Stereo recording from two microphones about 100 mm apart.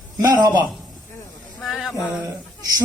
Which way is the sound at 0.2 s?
30° right (ahead or behind).